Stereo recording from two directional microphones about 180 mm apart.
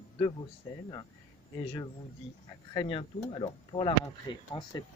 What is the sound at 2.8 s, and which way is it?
Speech, 30° left (ahead or behind).